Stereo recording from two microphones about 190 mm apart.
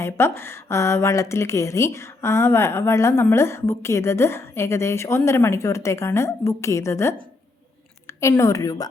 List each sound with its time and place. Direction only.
0.0 s a woman's voice: 10° left (ahead or behind)